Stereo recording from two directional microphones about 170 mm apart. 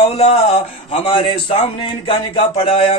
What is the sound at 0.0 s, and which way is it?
Speech, 35° left (ahead or behind).